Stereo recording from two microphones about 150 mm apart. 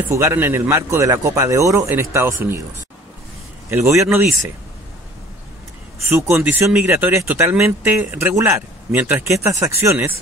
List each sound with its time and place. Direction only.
0.1 s speech: 20° right (ahead or behind)
3.7 s speech: 20° right (ahead or behind)
6.0 s speech: 15° right (ahead or behind)